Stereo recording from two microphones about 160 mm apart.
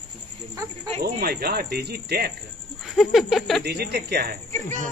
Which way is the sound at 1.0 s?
70° right (ahead or behind).